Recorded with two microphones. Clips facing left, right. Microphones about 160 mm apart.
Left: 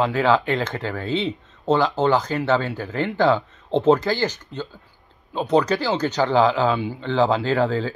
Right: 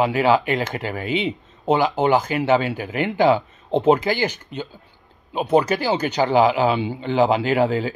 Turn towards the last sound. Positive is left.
turn(degrees=-15)  # may be behind; listen again after turning